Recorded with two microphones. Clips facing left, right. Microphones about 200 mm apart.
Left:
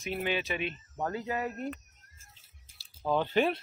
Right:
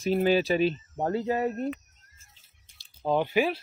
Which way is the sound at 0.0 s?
35° right (ahead or behind).